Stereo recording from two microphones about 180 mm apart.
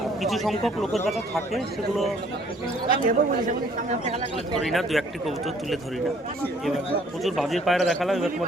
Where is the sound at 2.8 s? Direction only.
50° right (ahead or behind).